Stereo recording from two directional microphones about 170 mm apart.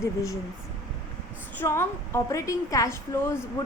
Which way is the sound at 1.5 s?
15° left (ahead or behind).